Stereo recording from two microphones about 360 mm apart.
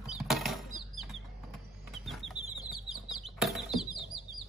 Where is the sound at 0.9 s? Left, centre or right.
Centre.